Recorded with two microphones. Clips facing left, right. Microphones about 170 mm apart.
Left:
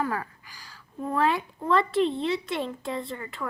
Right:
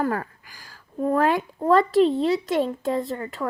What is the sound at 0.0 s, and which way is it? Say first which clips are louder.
A woman's voice: right 4 dB; 45° right (ahead or behind).